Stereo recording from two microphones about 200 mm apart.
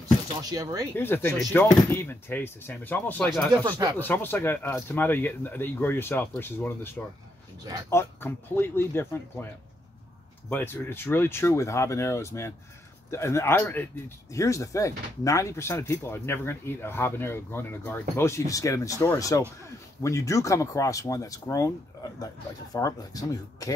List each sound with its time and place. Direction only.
0.4 s speech: 20° right (ahead or behind)
0.9 s speech: 10° left (ahead or behind)
3.5 s speech: 15° right (ahead or behind)
4.0 s speech: 10° left (ahead or behind)
10.5 s speech: 10° left (ahead or behind)